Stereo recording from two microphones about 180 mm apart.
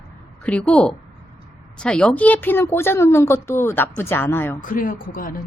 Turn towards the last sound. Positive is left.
turn(degrees=50)  # may be behind; listen again after turning